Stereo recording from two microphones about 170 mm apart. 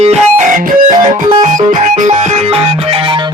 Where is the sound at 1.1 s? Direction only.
45° right (ahead or behind).